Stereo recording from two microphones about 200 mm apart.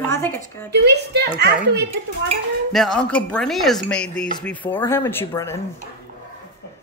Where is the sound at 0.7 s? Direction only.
55° right (ahead or behind).